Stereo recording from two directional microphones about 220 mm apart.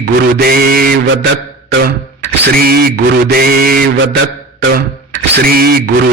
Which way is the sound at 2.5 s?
45° right (ahead or behind).